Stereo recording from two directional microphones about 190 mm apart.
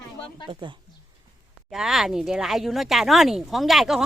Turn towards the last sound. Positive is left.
turn(degrees=0)  # may be behind; listen again after turning